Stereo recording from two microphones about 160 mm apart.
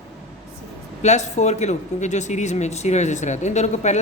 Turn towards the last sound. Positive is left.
turn(degrees=45)  # may be behind; listen again after turning